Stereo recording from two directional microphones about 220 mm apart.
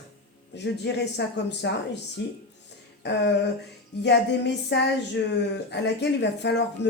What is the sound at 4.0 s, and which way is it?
Speech, 50° left (ahead or behind).